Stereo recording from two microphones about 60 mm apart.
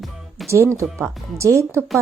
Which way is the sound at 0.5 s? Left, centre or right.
Right.